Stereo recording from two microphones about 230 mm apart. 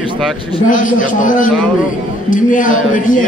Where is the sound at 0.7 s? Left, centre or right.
Left.